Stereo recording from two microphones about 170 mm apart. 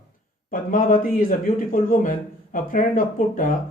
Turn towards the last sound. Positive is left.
turn(degrees=50)  # may be behind; listen again after turning